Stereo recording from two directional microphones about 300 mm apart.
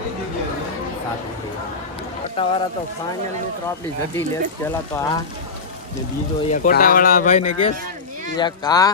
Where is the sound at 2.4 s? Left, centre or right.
Centre.